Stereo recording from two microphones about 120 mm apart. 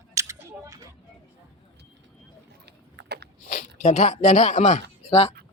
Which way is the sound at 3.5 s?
85° left.